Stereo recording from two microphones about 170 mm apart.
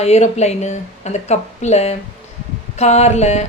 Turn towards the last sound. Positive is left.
turn(degrees=40)  # may be behind; listen again after turning